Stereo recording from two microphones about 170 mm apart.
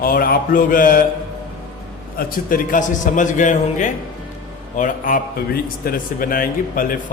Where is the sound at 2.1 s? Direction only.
55° left (ahead or behind).